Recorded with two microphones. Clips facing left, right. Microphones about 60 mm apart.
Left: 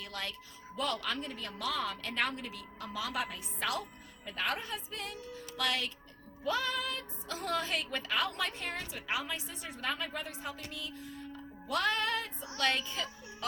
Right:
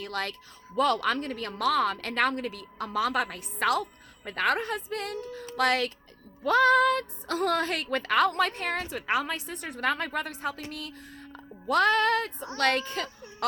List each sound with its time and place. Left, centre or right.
0.0 s a woman's voice: right
10.7 s music: right
12.5 s a woman's voice: right